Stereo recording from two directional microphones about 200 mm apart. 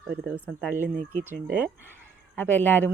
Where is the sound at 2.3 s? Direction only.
10° left (ahead or behind).